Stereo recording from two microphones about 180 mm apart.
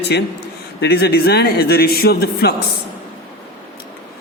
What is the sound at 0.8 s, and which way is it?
A man's voice, 60° left (ahead or behind).